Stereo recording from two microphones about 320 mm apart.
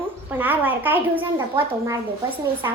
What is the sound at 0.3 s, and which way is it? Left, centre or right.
A woman's voice, centre.